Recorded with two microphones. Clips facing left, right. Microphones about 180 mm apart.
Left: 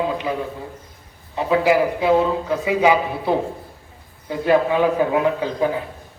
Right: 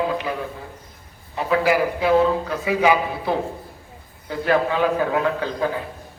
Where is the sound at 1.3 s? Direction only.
20° left (ahead or behind).